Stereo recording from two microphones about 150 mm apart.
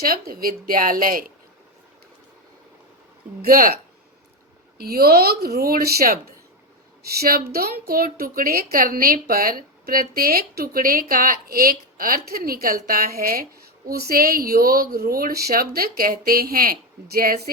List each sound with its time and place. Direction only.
0.0 s speech: 80° right
3.4 s speech: 70° right (ahead or behind)
4.8 s a woman's voice: 90° right